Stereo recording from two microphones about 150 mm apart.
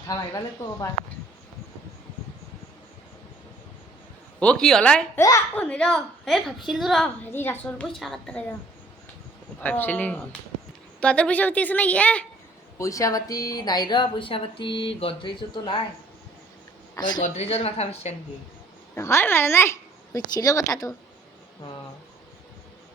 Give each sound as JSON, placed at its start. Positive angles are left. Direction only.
{"t": 0.1, "sound": "a woman's voice", "side_deg": 25}
{"t": 4.4, "sound": "a woman's voice", "side_deg": 5}
{"t": 7.3, "sound": "a woman's voice", "side_deg": 15}
{"t": 7.9, "sound": "a woman's voice", "side_deg": 0}
{"t": 9.6, "sound": "a woman's voice", "side_deg": 10}
{"t": 12.8, "sound": "speech", "side_deg": 20}
{"t": 16.9, "sound": "speech", "side_deg": 30}
{"t": 17.2, "sound": "a woman's voice", "side_deg": 45}
{"t": 18.9, "sound": "a woman's voice", "side_deg": 15}